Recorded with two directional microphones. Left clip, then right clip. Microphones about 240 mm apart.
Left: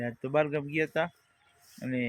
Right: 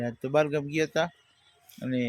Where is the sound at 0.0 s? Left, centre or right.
Centre.